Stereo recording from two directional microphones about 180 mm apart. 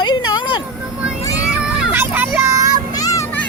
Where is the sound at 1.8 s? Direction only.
10° right (ahead or behind).